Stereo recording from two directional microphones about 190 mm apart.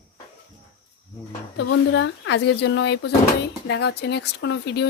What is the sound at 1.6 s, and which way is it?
Speech, 75° left (ahead or behind).